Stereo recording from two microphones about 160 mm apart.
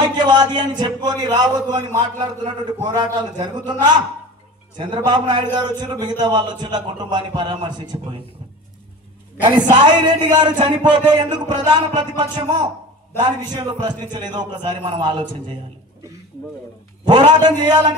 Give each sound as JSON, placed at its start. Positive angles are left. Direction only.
{"t": 0.2, "sound": "a man's voice", "side_deg": -25}
{"t": 4.7, "sound": "a man's voice", "side_deg": -30}
{"t": 9.8, "sound": "a man's voice", "side_deg": -30}
{"t": 17.0, "sound": "a man's voice", "side_deg": -30}